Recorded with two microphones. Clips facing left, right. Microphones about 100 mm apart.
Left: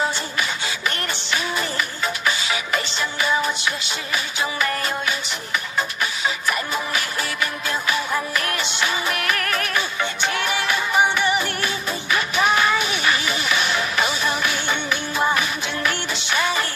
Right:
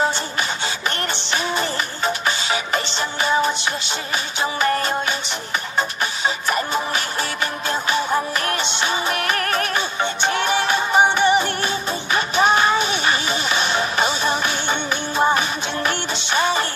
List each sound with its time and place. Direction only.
1.1 s music: 25° right (ahead or behind)